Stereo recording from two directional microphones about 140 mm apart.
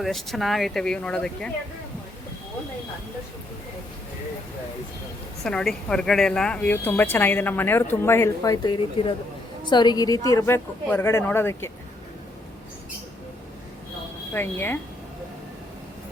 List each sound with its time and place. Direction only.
0.0 s speech: centre (ahead or behind)
5.4 s speech: 5° left (ahead or behind)
8.6 s a woman's voice: 40° left (ahead or behind); by 11.7 s 15° left (ahead or behind)
14.3 s speech: 15° left (ahead or behind)